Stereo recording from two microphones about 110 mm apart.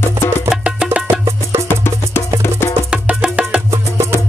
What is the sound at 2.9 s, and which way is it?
Music, 10° right (ahead or behind).